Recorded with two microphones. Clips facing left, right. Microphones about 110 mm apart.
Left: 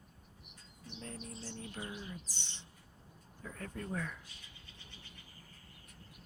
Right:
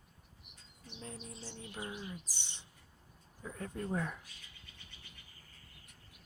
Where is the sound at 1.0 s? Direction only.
5° right (ahead or behind).